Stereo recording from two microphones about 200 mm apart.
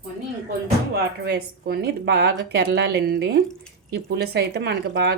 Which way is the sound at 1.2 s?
50° right (ahead or behind).